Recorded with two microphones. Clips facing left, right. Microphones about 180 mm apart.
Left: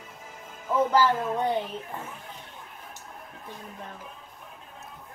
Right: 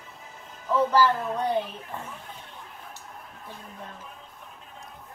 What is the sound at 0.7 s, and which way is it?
Speech, 15° left (ahead or behind).